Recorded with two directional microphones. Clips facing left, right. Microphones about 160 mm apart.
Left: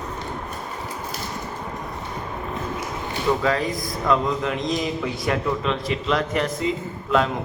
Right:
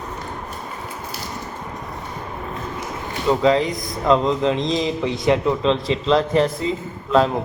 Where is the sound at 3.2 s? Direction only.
20° right (ahead or behind).